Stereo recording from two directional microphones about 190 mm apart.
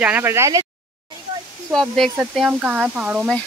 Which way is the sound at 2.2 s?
5° right (ahead or behind).